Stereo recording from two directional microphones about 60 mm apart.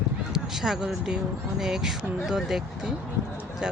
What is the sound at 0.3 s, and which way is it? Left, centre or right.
Speech, centre.